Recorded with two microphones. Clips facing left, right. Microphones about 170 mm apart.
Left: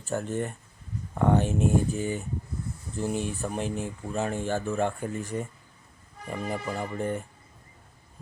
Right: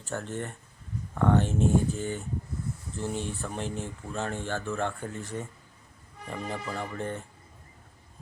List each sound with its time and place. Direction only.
0.0 s speech: 15° left (ahead or behind)